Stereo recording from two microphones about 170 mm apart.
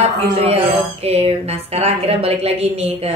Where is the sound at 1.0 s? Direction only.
35° right (ahead or behind).